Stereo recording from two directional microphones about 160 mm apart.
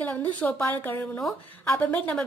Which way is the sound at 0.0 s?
10° left (ahead or behind).